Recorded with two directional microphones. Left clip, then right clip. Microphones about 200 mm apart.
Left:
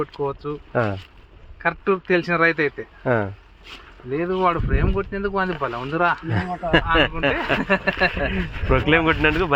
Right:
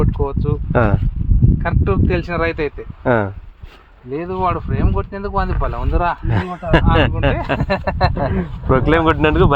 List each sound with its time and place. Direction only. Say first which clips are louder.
0.0 s speech: right 4 dB; 5° left (ahead or behind)
0.7 s speech: right 6 dB; 45° right (ahead or behind)
1.6 s speech: left 1 dB; 5° left (ahead or behind)
3.0 s speech: right 5 dB; 40° right (ahead or behind)
4.1 s speech: right 1 dB; centre (ahead or behind)
6.2 s speech: right 2 dB; 40° right (ahead or behind)
7.6 s speech: right 1 dB; 10° left (ahead or behind)
8.7 s speech: right 4 dB; 35° right (ahead or behind)